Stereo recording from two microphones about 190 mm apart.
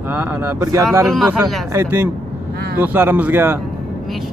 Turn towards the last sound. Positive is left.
turn(degrees=-10)  # may be behind; listen again after turning